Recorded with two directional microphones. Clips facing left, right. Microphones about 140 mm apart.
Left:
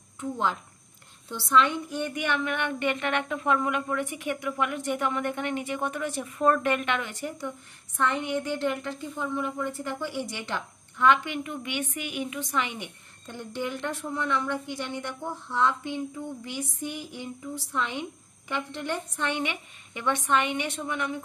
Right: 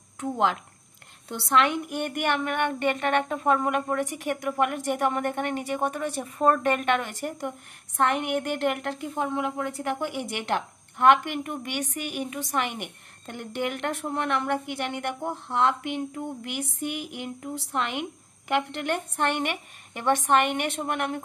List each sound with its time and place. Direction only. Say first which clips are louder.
0.2 s speech: right 4 dB; 80° right
1.3 s a woman's voice: even; 65° right (ahead or behind); by 7.4 s 45° right (ahead or behind)
8.0 s a woman's voice: right 3 dB; 65° right (ahead or behind); by 12.6 s 40° right (ahead or behind)
12.6 s a woman's voice: right 3 dB; 60° right (ahead or behind)
15.2 s a sound: right 2 dB; 65° right (ahead or behind)
18.5 s a woman's voice: right 5 dB; 70° right (ahead or behind)